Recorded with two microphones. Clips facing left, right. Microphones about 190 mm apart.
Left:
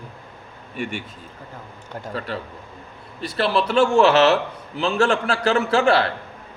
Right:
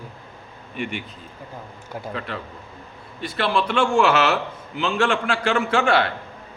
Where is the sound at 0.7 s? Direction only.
45° left (ahead or behind).